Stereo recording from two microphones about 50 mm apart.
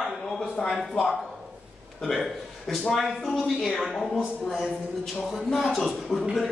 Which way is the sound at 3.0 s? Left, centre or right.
Centre.